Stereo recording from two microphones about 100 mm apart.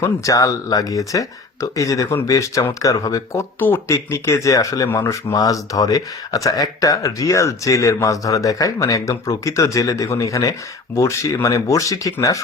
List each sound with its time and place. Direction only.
0.0 s speech: 35° left (ahead or behind)
3.6 s speech: 25° left (ahead or behind)